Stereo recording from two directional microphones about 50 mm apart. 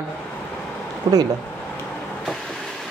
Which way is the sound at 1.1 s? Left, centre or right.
Right.